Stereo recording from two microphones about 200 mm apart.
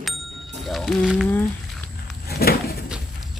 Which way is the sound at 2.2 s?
50° left (ahead or behind).